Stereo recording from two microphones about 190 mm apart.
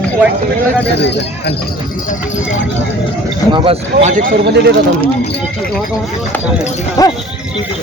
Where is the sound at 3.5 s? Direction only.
30° right (ahead or behind).